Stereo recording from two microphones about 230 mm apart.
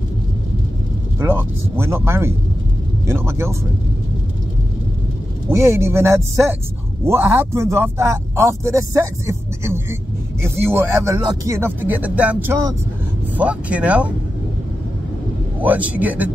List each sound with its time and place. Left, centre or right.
1.2 s speech: centre
5.5 s speech: centre
15.6 s speech: centre